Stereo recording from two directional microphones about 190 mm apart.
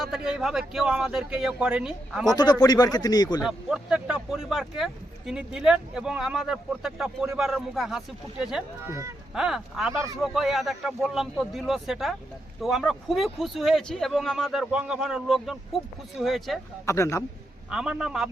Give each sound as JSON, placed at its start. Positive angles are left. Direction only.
{"t": 0.0, "sound": "speech", "side_deg": -5}
{"t": 2.3, "sound": "speech", "side_deg": 20}
{"t": 3.4, "sound": "speech", "side_deg": -5}
{"t": 16.8, "sound": "a man's voice", "side_deg": 15}
{"t": 17.7, "sound": "speech", "side_deg": -5}